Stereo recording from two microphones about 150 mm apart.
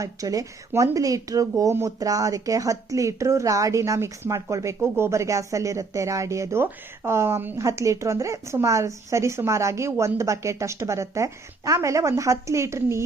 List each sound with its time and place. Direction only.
0.0 s speech: 20° right (ahead or behind)